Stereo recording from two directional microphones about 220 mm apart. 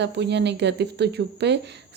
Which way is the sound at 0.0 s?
50° right (ahead or behind).